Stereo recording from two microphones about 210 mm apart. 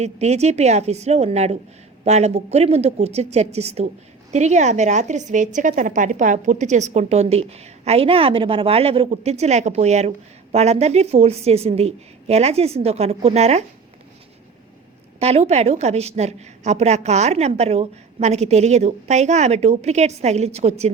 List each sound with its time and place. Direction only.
0.0 s a woman's voice: 30° right (ahead or behind)
15.2 s a woman's voice: 30° right (ahead or behind)